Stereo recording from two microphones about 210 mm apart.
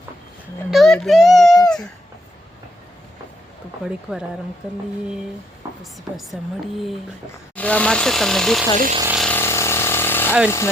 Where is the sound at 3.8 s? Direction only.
Centre (ahead or behind).